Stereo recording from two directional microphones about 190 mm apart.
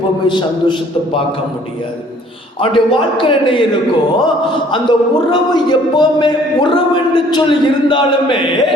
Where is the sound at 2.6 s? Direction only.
25° left (ahead or behind).